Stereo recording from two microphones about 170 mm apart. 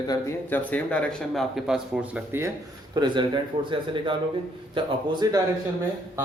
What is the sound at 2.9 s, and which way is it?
Speech, 25° right (ahead or behind).